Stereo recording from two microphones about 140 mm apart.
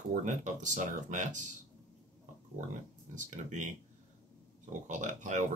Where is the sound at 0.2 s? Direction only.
60° right (ahead or behind).